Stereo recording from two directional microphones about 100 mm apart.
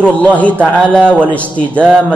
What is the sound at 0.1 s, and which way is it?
Speech, 15° left (ahead or behind).